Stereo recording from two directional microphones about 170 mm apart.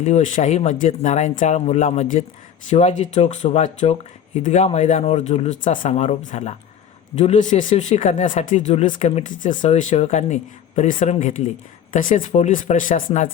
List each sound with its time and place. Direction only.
0.0 s speech: 45° left (ahead or behind)